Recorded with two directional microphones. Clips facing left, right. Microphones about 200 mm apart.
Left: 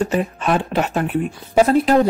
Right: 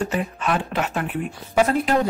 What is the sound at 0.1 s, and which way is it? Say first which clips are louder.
Speech: left 5 dB; 35° left (ahead or behind).